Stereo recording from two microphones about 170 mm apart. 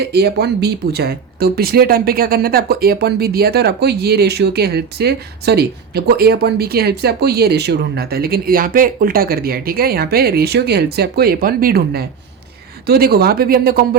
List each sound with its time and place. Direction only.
0.0 s speech: 70° right (ahead or behind)